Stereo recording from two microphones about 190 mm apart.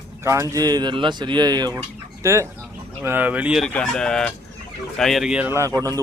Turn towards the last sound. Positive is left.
turn(degrees=-15)  # may be behind; listen again after turning